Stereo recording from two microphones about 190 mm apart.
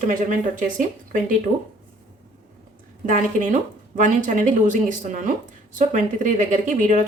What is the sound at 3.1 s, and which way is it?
Speech, 40° right (ahead or behind).